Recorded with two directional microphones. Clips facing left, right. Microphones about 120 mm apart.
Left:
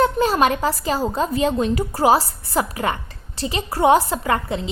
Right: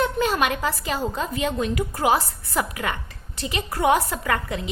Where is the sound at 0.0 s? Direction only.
35° left (ahead or behind).